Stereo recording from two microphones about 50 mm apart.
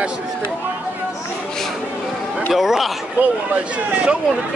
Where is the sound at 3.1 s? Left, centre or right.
Right.